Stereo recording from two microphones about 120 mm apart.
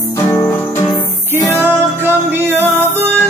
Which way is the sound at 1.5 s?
20° right (ahead or behind).